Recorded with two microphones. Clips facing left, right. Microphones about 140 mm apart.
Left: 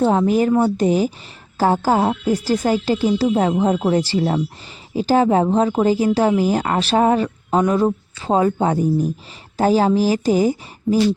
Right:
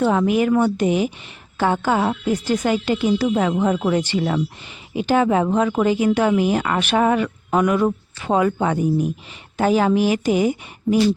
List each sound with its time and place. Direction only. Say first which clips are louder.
0.0 s speech: left 2 dB; 35° left (ahead or behind)